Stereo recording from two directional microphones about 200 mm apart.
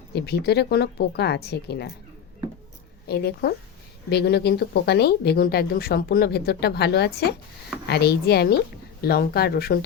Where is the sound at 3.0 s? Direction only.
50° left (ahead or behind).